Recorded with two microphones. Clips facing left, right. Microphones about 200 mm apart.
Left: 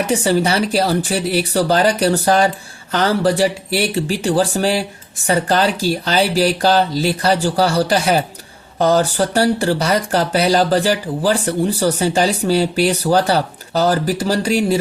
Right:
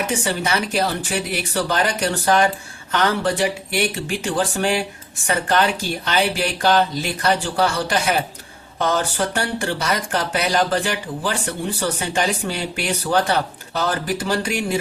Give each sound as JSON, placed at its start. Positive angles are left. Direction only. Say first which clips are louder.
{"t": 0.1, "sound": "speech", "louder": "left 6 dB", "side_deg": 35}